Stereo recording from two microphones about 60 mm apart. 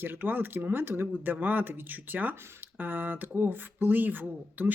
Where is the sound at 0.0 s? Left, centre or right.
Right.